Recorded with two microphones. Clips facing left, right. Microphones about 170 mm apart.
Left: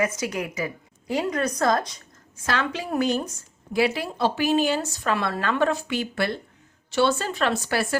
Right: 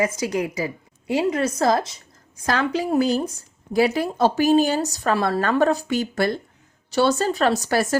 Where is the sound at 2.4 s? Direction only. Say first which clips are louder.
Right 5 dB; 40° right (ahead or behind).